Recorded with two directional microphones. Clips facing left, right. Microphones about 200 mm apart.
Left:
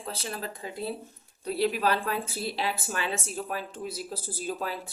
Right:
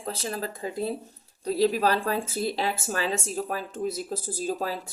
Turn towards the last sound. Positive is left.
turn(degrees=-40)  # may be behind; listen again after turning